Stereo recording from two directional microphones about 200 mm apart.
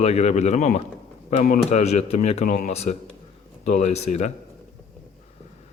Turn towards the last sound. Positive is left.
turn(degrees=30)  # may be behind; listen again after turning